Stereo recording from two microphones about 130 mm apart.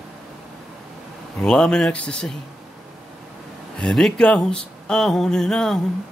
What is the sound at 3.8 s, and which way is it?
Speech, 5° left (ahead or behind).